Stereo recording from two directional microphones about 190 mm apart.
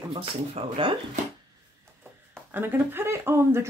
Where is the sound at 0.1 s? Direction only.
30° right (ahead or behind).